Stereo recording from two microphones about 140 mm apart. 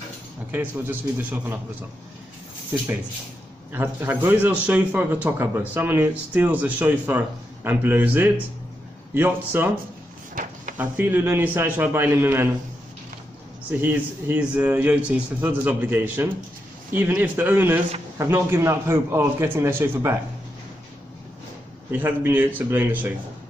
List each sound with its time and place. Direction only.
0.5 s a man's voice: 15° right (ahead or behind)
3.7 s a man's voice: 15° right (ahead or behind)
10.3 s drawer open or close: 70° right (ahead or behind)
10.8 s a man's voice: 15° right (ahead or behind)
13.7 s a man's voice: 15° right (ahead or behind)
21.9 s a man's voice: 15° right (ahead or behind)